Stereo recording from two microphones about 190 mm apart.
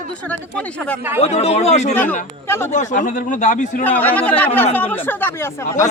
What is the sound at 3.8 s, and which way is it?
Speech, 10° left (ahead or behind).